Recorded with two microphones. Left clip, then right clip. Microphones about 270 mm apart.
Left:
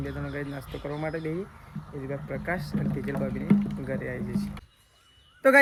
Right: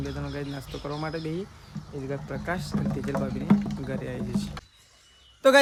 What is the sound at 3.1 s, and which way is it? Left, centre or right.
Speech, right.